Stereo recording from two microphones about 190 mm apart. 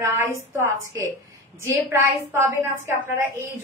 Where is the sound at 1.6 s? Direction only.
15° right (ahead or behind).